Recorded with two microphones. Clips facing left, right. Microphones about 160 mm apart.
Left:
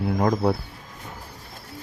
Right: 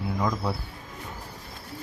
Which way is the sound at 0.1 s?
55° left (ahead or behind).